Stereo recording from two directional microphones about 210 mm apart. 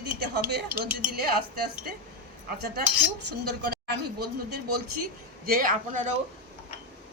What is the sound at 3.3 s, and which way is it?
A man's voice, 50° right (ahead or behind).